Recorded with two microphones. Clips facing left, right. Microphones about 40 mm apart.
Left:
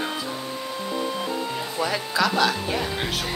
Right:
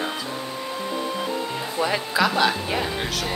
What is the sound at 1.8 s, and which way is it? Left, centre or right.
Speech, centre.